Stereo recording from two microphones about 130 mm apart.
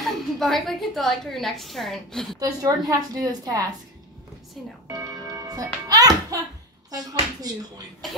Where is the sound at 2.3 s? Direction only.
30° right (ahead or behind).